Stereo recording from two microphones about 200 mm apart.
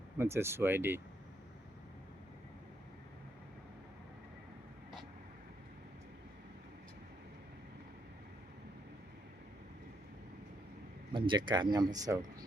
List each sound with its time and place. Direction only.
0.2 s speech: 10° right (ahead or behind)
11.1 s speech: 25° right (ahead or behind)